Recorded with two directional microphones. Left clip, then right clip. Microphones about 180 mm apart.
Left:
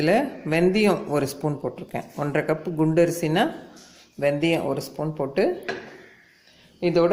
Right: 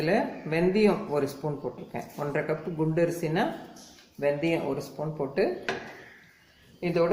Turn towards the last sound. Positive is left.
turn(degrees=50)  # may be behind; listen again after turning